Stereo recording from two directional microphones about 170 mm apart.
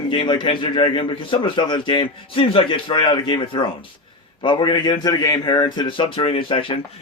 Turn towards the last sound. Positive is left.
turn(degrees=30)  # may be behind; listen again after turning